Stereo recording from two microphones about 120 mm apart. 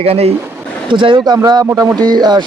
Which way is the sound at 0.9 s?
40° right (ahead or behind).